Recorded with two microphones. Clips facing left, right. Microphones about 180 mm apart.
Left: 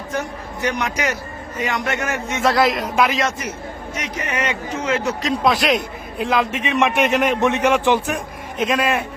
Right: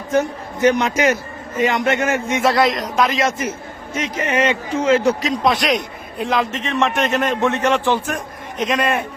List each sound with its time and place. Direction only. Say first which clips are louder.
0.1 s a man's voice: right 9 dB; 25° right (ahead or behind)
2.4 s a man's voice: left 1 dB; centre (ahead or behind)
3.9 s speech: right 6 dB; 25° right (ahead or behind)
5.2 s a man's voice: even; centre (ahead or behind)
6.5 s a man's voice: left 1 dB; 10° left (ahead or behind)